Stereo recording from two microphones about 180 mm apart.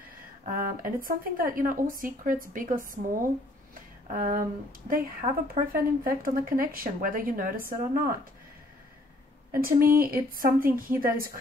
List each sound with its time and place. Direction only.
0.5 s speech: 50° right (ahead or behind)
4.1 s speech: 50° right (ahead or behind)
9.5 s speech: 55° right (ahead or behind)